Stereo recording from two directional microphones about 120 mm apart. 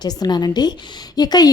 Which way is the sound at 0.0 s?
35° left (ahead or behind).